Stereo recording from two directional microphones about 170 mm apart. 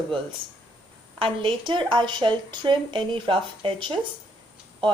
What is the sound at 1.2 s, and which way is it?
Speech, 30° right (ahead or behind).